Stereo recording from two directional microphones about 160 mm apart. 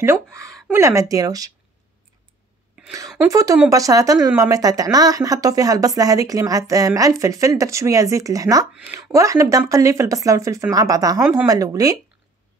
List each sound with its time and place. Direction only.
0.0 s speech: 15° right (ahead or behind)
2.8 s a sound: 5° right (ahead or behind)
3.2 s speech: 20° right (ahead or behind)